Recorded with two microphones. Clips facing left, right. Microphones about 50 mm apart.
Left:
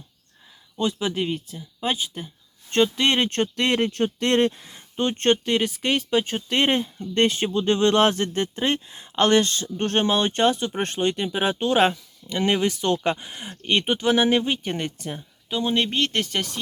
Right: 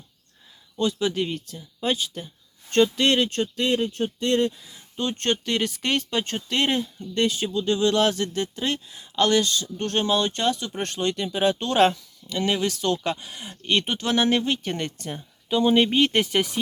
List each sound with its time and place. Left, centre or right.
0.8 s speech: centre
3.2 s speech: left
5.5 s speech: centre
6.5 s speech: left
12.4 s speech: left; by 16.6 s centre